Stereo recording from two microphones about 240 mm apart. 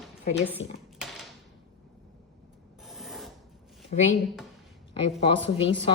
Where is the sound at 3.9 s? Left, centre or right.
Left.